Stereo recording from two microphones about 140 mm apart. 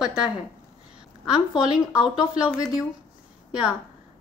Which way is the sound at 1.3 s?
5° right (ahead or behind).